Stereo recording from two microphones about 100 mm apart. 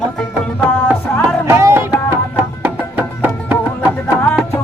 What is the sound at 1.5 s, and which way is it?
Music, 25° right (ahead or behind).